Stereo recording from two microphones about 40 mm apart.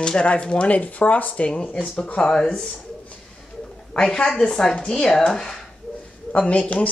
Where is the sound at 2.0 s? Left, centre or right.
Left.